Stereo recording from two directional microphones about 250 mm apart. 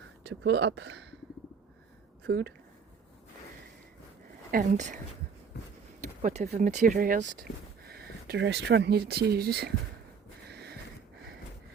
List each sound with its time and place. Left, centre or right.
0.2 s speech: right
2.2 s speech: right
4.5 s speech: right
5.5 s a sound: left
6.2 s speech: right
10.4 s a sound: right